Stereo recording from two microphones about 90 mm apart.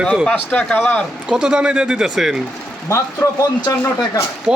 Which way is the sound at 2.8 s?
35° left (ahead or behind).